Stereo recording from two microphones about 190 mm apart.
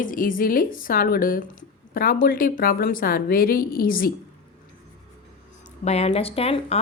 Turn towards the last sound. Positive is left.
turn(degrees=30)  # may be behind; listen again after turning